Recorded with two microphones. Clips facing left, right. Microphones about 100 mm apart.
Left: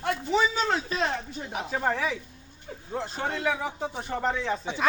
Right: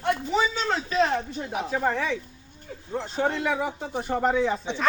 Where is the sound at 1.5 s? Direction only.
Centre (ahead or behind).